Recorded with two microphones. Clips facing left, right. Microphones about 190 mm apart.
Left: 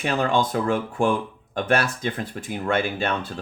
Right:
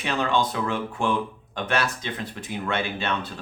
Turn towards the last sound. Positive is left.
turn(degrees=50)  # may be behind; listen again after turning